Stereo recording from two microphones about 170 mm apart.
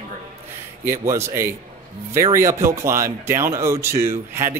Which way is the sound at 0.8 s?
15° right (ahead or behind).